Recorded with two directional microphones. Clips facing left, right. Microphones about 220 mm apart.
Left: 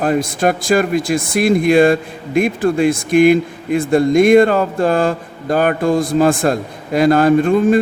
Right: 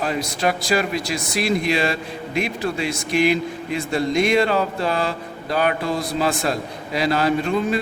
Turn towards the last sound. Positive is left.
turn(degrees=50)  # may be behind; listen again after turning